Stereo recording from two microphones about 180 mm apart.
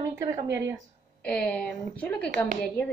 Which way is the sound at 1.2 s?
5° left (ahead or behind).